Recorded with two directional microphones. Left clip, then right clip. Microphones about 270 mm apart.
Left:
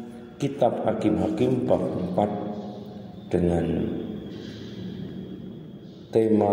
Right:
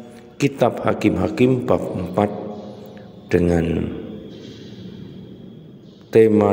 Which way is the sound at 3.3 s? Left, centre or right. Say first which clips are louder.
Right 6 dB; right.